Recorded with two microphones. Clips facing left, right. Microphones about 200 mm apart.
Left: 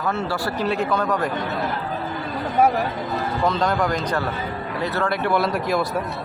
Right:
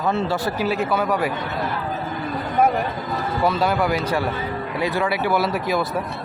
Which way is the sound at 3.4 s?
10° right (ahead or behind).